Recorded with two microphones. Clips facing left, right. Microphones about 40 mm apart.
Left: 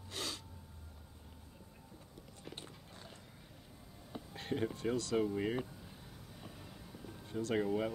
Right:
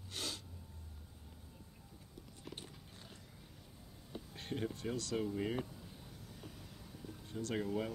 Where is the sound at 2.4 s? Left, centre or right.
Centre.